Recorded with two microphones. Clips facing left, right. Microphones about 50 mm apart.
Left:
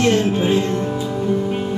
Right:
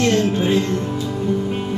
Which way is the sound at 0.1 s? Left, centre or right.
Centre.